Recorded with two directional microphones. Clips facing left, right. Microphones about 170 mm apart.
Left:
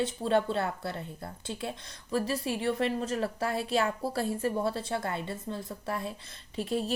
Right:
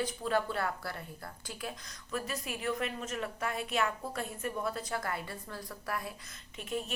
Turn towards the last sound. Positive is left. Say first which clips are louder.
# left 7 dB
turn(degrees=35)  # may be behind; listen again after turning